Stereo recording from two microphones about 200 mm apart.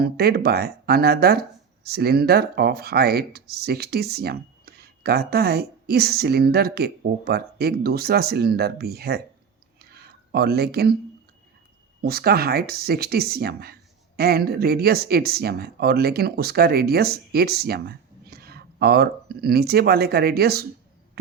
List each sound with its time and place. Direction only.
0.0 s speech: 50° right (ahead or behind)
9.7 s a sound: 50° right (ahead or behind)
12.0 s speech: 50° right (ahead or behind)